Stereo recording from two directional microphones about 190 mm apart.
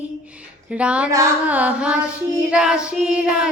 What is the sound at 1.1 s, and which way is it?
Child singing, 10° right (ahead or behind).